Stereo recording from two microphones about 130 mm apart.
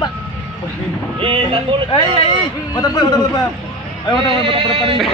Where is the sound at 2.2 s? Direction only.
35° left (ahead or behind).